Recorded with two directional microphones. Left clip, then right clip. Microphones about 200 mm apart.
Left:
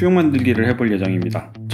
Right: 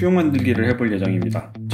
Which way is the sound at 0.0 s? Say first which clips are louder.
Left 3 dB; 40° left (ahead or behind).